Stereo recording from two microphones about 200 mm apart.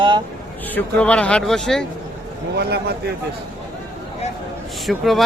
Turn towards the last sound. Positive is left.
turn(degrees=0)  # may be behind; listen again after turning